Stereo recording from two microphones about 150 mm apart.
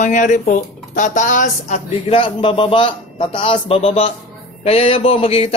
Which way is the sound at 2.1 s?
35° left (ahead or behind).